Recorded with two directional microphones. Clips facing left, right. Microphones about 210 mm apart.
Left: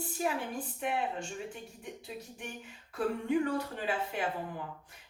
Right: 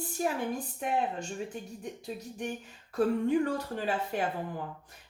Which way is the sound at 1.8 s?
40° right (ahead or behind).